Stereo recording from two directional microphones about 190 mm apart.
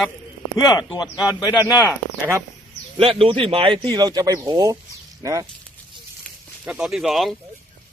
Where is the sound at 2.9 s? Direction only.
30° right (ahead or behind).